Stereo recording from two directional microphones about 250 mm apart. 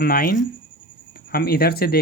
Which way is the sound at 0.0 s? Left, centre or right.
Left.